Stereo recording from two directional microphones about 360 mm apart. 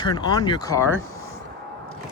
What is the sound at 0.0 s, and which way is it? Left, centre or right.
Speech, centre.